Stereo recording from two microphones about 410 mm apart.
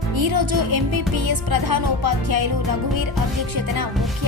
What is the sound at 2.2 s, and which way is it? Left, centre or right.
Speech, right.